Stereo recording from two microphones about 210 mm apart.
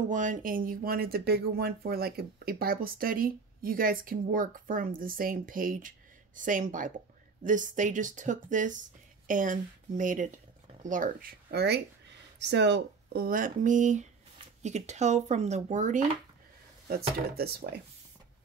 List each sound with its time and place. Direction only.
0.1 s speech: 40° right (ahead or behind)
17.4 s speech: 50° right (ahead or behind)